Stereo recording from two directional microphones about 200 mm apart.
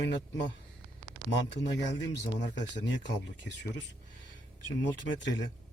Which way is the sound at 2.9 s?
60° left (ahead or behind).